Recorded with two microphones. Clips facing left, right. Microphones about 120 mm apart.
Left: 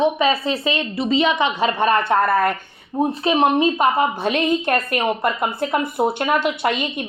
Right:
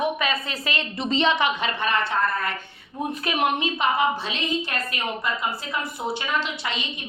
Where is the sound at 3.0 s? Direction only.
30° left (ahead or behind).